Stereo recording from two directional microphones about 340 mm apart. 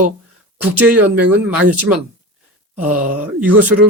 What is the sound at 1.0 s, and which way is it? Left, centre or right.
Speech, right.